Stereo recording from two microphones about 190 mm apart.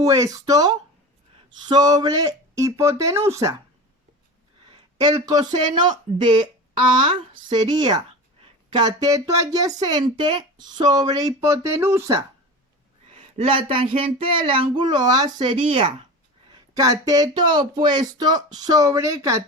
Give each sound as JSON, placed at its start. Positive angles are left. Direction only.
{"t": 0.0, "sound": "speech", "side_deg": -20}
{"t": 4.9, "sound": "speech", "side_deg": -20}
{"t": 13.1, "sound": "speech", "side_deg": -30}